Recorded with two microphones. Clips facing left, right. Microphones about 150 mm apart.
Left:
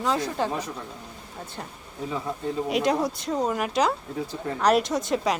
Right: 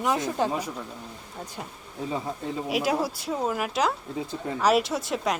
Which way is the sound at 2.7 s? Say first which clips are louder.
Left 1 dB; 5° right (ahead or behind).